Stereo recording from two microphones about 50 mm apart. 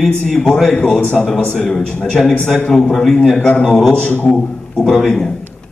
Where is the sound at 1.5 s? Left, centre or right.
Centre.